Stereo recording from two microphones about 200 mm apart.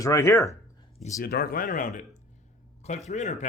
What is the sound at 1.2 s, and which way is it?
Speech, 50° left (ahead or behind).